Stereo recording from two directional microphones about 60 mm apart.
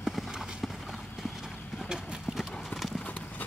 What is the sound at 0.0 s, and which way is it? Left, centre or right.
Clip-clop, centre.